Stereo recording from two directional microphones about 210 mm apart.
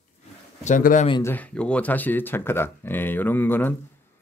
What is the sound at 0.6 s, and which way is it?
Speech, 40° left (ahead or behind).